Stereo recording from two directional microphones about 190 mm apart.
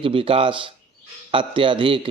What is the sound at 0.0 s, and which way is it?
Speech, 30° right (ahead or behind).